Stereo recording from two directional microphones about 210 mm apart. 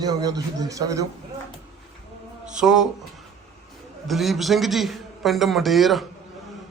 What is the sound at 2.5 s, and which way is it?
Speech, 5° right (ahead or behind).